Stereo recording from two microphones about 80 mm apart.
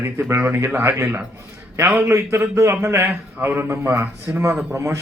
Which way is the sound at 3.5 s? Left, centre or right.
Right.